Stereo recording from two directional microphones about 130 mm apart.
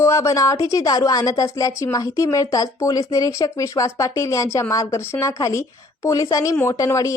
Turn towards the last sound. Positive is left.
turn(degrees=25)  # may be behind; listen again after turning